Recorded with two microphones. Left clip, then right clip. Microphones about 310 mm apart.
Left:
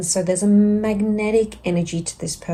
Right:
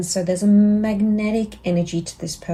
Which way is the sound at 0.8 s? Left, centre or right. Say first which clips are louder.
Left 1 dB; centre.